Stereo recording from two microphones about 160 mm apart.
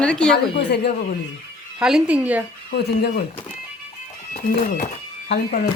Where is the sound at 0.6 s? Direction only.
90° left.